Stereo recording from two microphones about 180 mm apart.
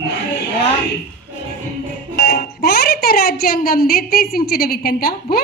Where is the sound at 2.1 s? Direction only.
65° left (ahead or behind).